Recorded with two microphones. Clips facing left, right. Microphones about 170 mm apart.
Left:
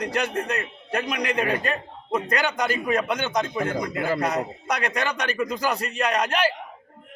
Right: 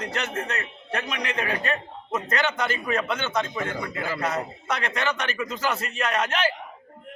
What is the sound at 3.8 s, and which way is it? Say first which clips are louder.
Speech: left 5 dB; 50° left (ahead or behind).